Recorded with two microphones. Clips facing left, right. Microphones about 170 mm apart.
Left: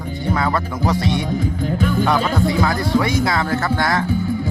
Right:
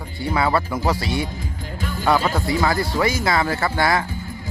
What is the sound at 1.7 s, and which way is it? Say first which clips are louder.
Speech: left 9 dB; 55° left (ahead or behind).